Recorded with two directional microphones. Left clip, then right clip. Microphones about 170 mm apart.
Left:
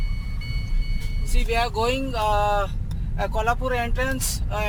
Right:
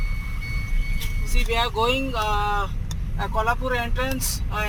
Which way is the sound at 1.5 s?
25° left (ahead or behind).